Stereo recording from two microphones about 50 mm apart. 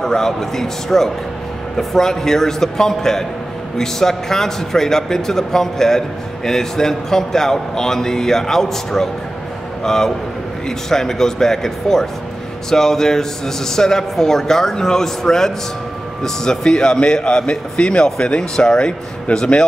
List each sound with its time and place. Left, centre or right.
0.0 s a man's voice: centre